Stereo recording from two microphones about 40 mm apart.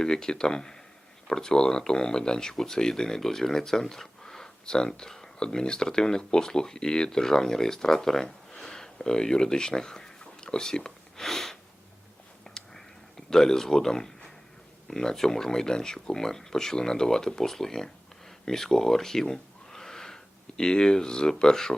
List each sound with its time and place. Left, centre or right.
0.0 s speech: centre
11.3 s a sound: centre
12.5 s a sound: centre
14.8 s speech: centre
18.4 s gasp: centre
20.6 s speech: centre